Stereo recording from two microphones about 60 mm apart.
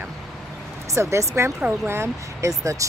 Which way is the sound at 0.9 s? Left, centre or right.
Right.